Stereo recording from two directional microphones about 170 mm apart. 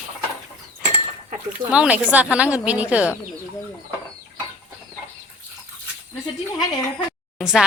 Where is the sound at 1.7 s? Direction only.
5° right (ahead or behind).